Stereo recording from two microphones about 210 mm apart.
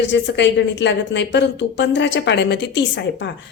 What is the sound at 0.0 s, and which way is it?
A woman's voice, 60° left (ahead or behind).